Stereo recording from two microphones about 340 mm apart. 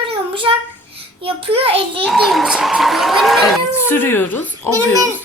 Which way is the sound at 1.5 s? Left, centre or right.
Centre.